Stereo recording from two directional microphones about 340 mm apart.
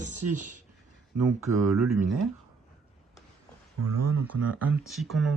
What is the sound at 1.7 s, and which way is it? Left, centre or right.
Speech, centre.